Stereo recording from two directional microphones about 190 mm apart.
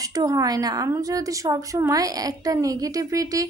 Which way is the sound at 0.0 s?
20° right (ahead or behind).